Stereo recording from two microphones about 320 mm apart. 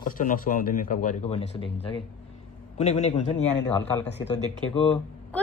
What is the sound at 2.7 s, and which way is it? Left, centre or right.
Speech, left.